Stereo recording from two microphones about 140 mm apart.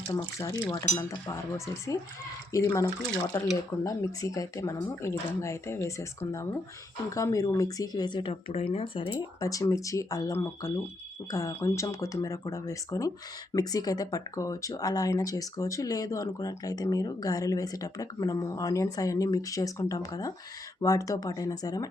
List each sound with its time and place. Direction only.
0.3 s speech: 25° left (ahead or behind)
9.4 s speech: 25° left (ahead or behind)